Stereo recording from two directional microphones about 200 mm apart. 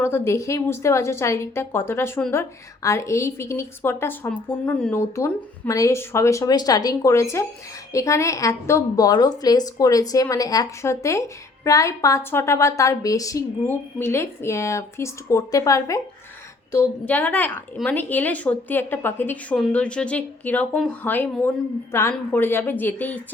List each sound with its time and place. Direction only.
0.0 s a woman's voice: 10° left (ahead or behind)